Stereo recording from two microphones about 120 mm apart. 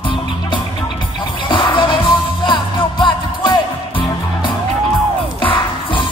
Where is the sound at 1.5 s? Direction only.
40° left (ahead or behind).